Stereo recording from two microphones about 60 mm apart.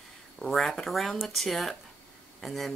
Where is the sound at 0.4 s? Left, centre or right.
Centre.